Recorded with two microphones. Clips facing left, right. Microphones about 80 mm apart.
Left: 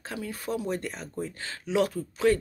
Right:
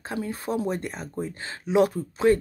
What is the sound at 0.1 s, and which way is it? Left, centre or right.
Speech, right.